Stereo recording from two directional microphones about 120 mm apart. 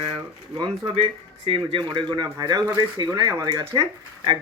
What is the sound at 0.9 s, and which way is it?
Speech, 55° right (ahead or behind).